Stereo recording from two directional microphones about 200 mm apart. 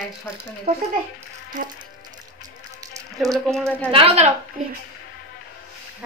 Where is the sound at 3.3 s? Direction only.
5° left (ahead or behind).